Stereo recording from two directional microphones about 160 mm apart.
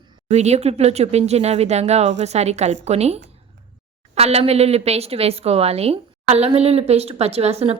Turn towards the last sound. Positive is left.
turn(degrees=-40)  # may be behind; listen again after turning